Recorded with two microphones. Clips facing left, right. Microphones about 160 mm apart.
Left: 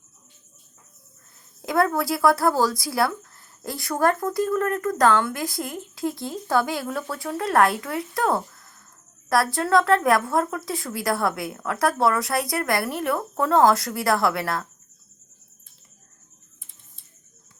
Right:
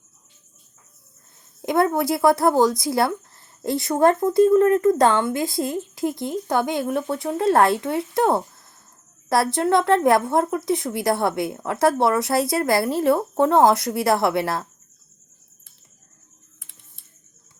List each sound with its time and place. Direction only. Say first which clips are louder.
1.6 s a woman's voice: right 2 dB; 25° right (ahead or behind)
16.6 s typing: right 3 dB; 75° right (ahead or behind)